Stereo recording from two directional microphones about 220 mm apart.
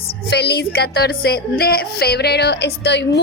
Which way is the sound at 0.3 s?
50° left (ahead or behind).